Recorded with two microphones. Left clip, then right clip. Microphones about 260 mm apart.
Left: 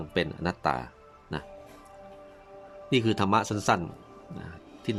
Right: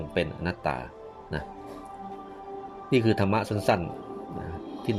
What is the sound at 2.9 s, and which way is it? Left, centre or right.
Speech, centre.